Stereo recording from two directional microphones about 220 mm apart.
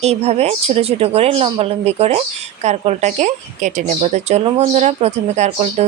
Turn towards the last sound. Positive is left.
turn(degrees=-30)  # may be behind; listen again after turning